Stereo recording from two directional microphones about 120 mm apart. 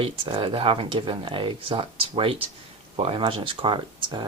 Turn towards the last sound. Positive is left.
turn(degrees=-40)  # may be behind; listen again after turning